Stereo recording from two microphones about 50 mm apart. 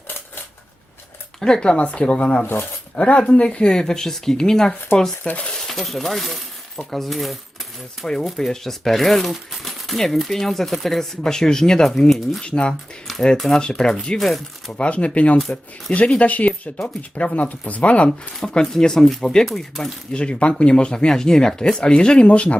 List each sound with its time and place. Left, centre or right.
1.4 s speech: centre
5.2 s speech: left
5.5 s speech: centre
12.4 s speech: centre
13.1 s speech: centre
14.2 s speech: centre
14.7 s speech: left
18.3 s speech: centre
20.1 s speech: centre